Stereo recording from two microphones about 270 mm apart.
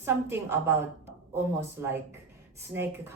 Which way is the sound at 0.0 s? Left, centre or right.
Centre.